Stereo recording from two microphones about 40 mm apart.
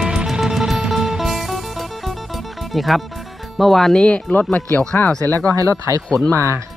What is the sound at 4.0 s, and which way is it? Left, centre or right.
Speech, left.